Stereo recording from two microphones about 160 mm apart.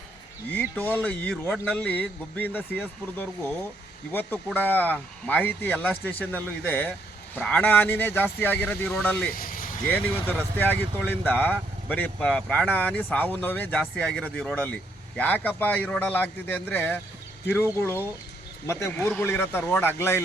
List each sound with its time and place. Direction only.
0.5 s speech: 10° left (ahead or behind)
9.3 s vehicle: 60° left (ahead or behind)
10.6 s speech: 10° left (ahead or behind)